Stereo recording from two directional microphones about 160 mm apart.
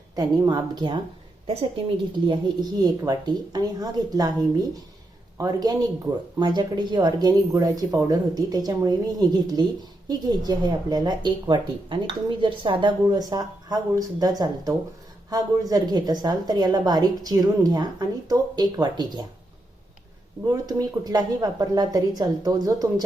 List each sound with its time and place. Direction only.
0.2 s a woman's voice: 25° right (ahead or behind)
2.2 s a woman's voice: 25° right (ahead or behind)
20.5 s a woman's voice: 25° right (ahead or behind)